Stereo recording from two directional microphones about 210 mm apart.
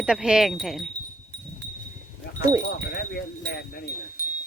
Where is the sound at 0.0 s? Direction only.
5° right (ahead or behind).